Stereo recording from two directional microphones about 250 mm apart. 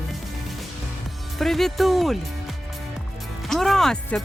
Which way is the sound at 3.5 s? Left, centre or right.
Centre.